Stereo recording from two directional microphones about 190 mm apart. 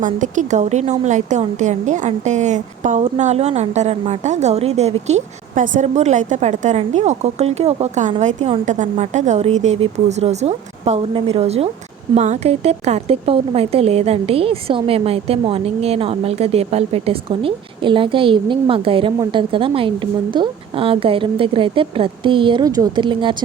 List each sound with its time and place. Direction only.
0.0 s a woman's voice: 40° right (ahead or behind); by 23.4 s 25° right (ahead or behind)